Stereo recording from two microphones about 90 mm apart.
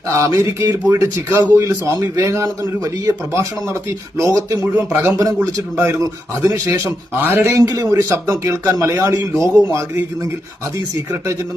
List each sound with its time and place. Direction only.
0.2 s a man's voice: 35° right (ahead or behind)
4.6 s a man's voice: 30° right (ahead or behind)
5.7 s a man's voice: 25° right (ahead or behind)
7.5 s a man's voice: 40° right (ahead or behind)